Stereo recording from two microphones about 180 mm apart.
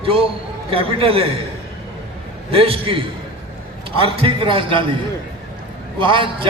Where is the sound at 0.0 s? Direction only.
30° right (ahead or behind).